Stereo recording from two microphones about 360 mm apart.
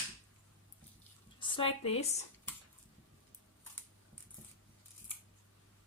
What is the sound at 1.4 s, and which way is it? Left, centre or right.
Speech, centre.